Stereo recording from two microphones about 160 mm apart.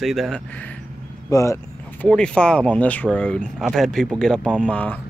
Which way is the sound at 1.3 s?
20° left (ahead or behind).